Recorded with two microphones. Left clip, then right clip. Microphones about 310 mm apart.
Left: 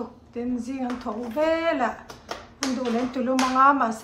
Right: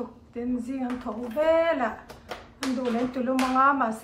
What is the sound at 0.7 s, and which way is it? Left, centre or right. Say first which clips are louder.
Speech: left 2 dB; centre.